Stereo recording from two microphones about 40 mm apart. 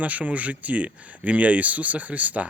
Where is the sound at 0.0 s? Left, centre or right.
Right.